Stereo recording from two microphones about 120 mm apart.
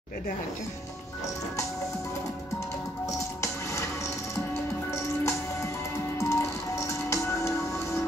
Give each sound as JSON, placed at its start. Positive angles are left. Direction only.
{"t": 3.1, "sound": "music", "side_deg": 25}
{"t": 4.9, "sound": "music", "side_deg": 25}